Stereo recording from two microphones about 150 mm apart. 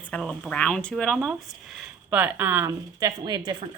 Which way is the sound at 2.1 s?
10° right (ahead or behind).